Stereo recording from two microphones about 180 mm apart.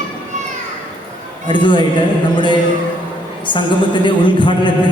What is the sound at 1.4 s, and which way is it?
A man's voice, 25° left (ahead or behind).